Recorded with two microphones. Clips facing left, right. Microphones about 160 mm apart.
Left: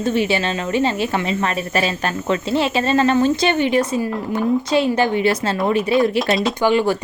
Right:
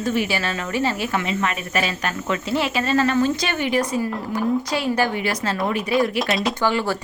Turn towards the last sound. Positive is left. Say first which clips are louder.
# left 5 dB
turn(degrees=20)  # may be behind; listen again after turning